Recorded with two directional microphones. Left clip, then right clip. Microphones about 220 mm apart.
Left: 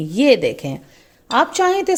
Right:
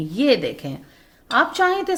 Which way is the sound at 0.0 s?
30° left (ahead or behind).